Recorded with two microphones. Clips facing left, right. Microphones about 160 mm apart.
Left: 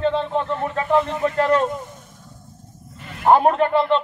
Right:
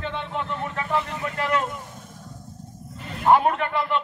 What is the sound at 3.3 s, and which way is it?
Speech, 35° left (ahead or behind).